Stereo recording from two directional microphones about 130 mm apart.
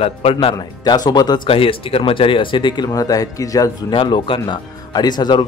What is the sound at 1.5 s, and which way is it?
Speech, 45° left (ahead or behind).